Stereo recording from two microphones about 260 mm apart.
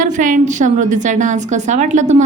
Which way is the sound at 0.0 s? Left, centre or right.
Right.